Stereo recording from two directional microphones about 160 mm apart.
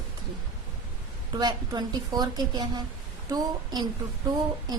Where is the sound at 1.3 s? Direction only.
25° right (ahead or behind).